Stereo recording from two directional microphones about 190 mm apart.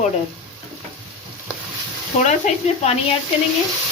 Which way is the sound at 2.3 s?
35° left (ahead or behind).